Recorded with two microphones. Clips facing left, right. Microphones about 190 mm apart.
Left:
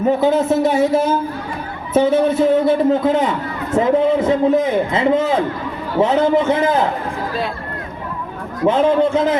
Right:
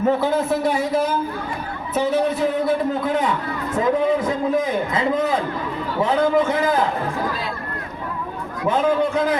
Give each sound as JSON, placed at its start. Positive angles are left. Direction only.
{"t": 0.0, "sound": "a man's voice", "side_deg": 20}
{"t": 8.6, "sound": "a man's voice", "side_deg": 25}